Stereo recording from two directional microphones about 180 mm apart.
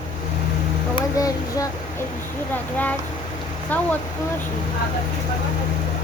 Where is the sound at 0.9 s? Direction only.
20° left (ahead or behind).